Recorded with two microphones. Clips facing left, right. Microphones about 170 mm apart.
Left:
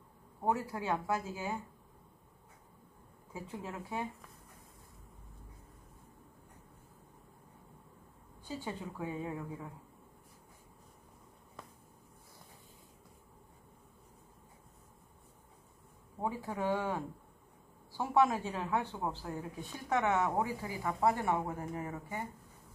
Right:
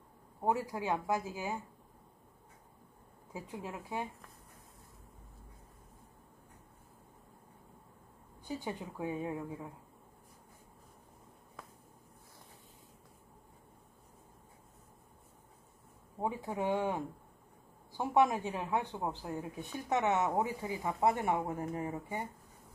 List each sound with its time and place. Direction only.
0.5 s a woman's voice: 15° right (ahead or behind)
3.3 s a woman's voice: 15° right (ahead or behind)
8.5 s a woman's voice: 15° right (ahead or behind)
16.2 s a woman's voice: 20° right (ahead or behind)